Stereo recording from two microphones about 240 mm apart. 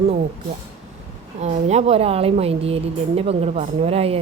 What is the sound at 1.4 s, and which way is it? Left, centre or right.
Speech, right.